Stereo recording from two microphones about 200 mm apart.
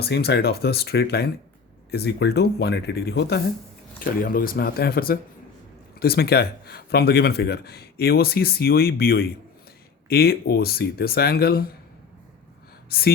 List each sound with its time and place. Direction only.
0.0 s speech: 55° left (ahead or behind)
4.0 s speech: 45° left (ahead or behind)
12.9 s speech: 50° left (ahead or behind)